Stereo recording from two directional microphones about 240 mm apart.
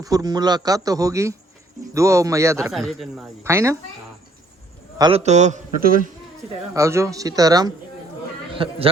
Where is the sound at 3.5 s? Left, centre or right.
Centre.